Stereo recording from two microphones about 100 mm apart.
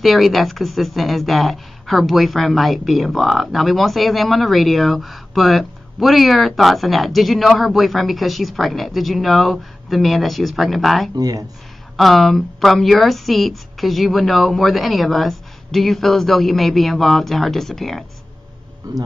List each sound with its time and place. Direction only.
0.0 s speech: centre (ahead or behind)
11.1 s speech: 40° right (ahead or behind)
12.0 s speech: centre (ahead or behind)